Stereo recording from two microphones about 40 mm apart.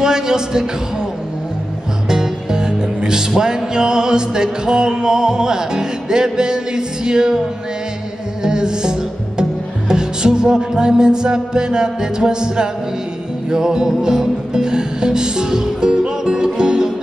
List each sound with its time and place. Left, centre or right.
0.0 s a man's voice: centre
2.0 s music: centre
8.4 s music: centre